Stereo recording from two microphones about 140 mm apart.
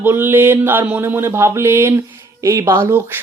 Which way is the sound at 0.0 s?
15° right (ahead or behind).